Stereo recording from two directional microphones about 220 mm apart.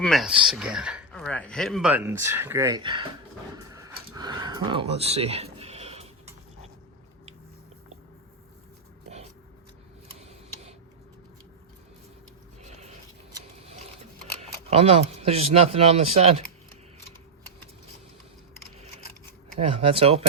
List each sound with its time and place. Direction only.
0.0 s speech: centre (ahead or behind)
1.2 s speech: 5° left (ahead or behind); by 3.1 s 20° right (ahead or behind)
3.6 s a sound: 15° right (ahead or behind)
12.6 s a sound: 30° right (ahead or behind)
14.4 s speech: 25° right (ahead or behind)
19.5 s speech: 25° right (ahead or behind)